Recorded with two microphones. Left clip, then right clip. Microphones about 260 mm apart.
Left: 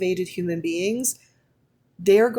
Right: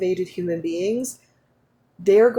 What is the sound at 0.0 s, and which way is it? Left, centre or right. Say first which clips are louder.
Speech: right 1 dB; left.